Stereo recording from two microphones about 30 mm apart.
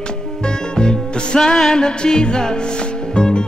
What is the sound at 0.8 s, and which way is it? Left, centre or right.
Music, left.